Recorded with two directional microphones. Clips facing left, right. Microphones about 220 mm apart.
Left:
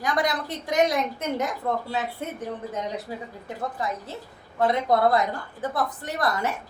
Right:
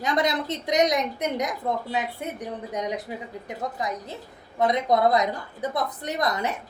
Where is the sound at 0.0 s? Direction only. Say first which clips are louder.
Right 1 dB; 25° right (ahead or behind).